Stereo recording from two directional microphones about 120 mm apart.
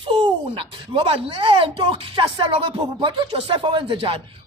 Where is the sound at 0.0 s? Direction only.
45° right (ahead or behind).